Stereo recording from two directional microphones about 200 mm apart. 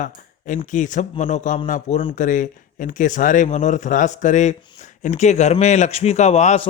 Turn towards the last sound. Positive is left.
turn(degrees=35)  # may be behind; listen again after turning